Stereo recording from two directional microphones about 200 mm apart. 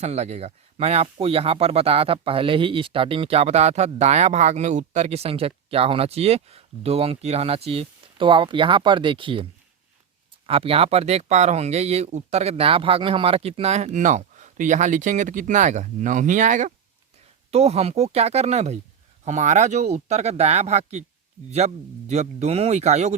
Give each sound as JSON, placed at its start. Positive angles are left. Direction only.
{"t": 0.0, "sound": "speech", "side_deg": -35}